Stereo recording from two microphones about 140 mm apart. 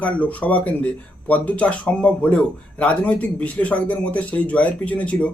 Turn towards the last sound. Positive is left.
turn(degrees=10)  # may be behind; listen again after turning